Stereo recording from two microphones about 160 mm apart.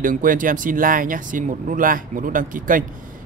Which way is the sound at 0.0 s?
55° right (ahead or behind).